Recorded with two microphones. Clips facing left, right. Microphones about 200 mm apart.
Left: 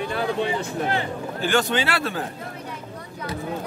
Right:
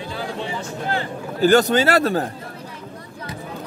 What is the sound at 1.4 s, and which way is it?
Speech, 40° right (ahead or behind).